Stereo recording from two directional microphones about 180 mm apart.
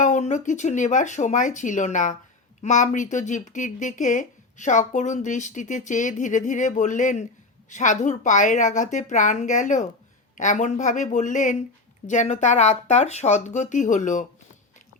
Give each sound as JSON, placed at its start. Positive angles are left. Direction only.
{"t": 0.0, "sound": "speech", "side_deg": 40}